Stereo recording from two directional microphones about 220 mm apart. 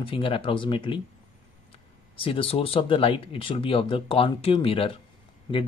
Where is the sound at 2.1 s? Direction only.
25° left (ahead or behind).